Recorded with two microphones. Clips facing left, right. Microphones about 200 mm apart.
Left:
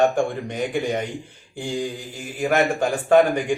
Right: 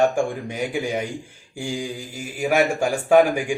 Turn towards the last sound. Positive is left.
turn(degrees=-10)  # may be behind; listen again after turning